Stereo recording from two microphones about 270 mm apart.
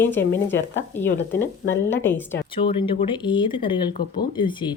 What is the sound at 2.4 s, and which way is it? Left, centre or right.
A woman's voice, centre.